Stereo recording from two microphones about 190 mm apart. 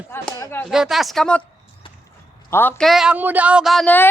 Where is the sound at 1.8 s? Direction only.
25° left (ahead or behind).